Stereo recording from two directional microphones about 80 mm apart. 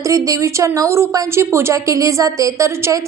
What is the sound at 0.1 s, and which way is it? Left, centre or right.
Speech, right.